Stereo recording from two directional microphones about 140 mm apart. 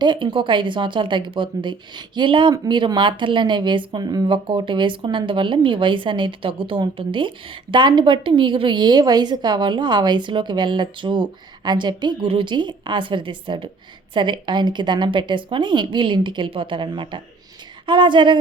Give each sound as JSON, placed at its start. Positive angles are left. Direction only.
{"t": 0.0, "sound": "a woman's voice", "side_deg": -35}